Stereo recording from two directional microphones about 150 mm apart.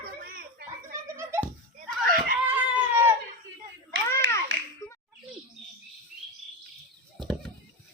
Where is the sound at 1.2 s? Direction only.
15° right (ahead or behind).